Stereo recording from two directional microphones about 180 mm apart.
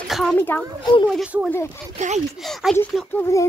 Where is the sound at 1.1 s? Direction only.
5° right (ahead or behind).